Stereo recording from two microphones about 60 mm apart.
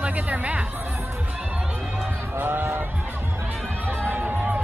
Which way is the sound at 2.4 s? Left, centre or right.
Right.